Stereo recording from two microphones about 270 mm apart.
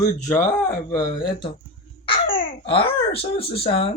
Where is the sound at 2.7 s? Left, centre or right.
Centre.